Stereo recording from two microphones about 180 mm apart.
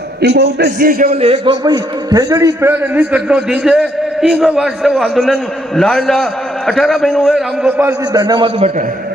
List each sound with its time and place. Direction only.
0.2 s a man's voice: 65° right (ahead or behind)
1.1 s a man's voice: 35° right (ahead or behind)
1.6 s a man's voice: 20° right (ahead or behind); by 7.9 s 5° right (ahead or behind)
8.1 s a man's voice: 25° right (ahead or behind)